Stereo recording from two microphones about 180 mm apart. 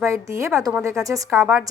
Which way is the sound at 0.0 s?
15° right (ahead or behind).